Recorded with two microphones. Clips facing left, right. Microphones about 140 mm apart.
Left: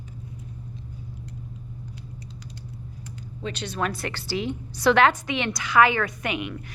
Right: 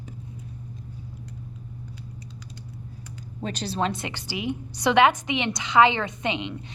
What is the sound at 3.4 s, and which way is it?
A woman's voice, 40° right (ahead or behind).